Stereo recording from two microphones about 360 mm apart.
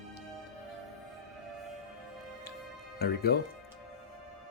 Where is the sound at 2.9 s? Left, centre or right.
Left.